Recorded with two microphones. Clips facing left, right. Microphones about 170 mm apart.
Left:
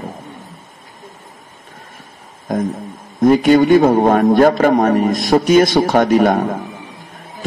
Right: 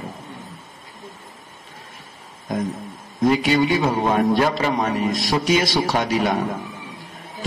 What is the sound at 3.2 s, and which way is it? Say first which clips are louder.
A man's voice: left 7 dB; 50° left (ahead or behind).